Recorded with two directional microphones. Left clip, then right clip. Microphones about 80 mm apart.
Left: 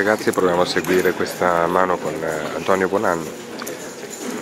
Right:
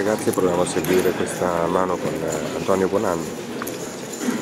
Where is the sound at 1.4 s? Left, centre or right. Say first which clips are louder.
Left 4 dB; left.